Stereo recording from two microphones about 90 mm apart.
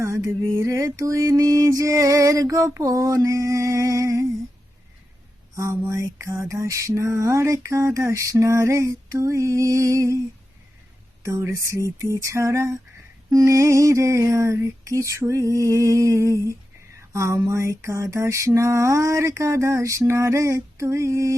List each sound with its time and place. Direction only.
0.3 s mantra: 35° right (ahead or behind)
5.5 s mantra: 35° right (ahead or behind)
11.2 s mantra: 35° right (ahead or behind)
17.0 s a sound: 30° right (ahead or behind)
17.5 s mantra: 35° right (ahead or behind)